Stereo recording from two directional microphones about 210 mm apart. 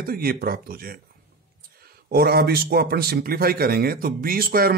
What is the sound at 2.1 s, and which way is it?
Speech, 50° right (ahead or behind).